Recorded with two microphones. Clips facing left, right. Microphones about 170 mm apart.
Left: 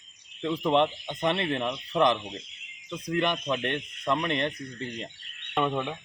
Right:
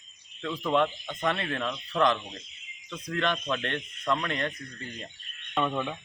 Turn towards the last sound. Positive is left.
turn(degrees=5)  # may be behind; listen again after turning